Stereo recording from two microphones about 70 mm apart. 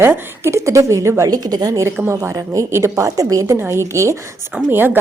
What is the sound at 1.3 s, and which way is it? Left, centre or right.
Speech, right.